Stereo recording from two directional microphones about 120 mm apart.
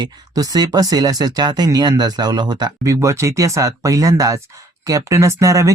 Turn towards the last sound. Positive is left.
turn(degrees=-30)  # may be behind; listen again after turning